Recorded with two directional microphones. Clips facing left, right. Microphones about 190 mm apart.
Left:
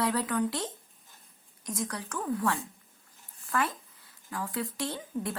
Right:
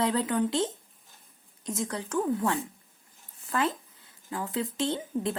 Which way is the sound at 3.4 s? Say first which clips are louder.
Right 2 dB; 20° right (ahead or behind).